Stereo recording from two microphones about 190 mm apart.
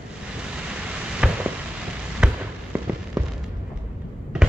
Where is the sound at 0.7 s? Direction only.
5° right (ahead or behind).